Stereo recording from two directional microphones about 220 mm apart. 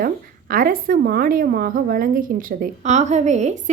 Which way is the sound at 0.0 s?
40° right (ahead or behind).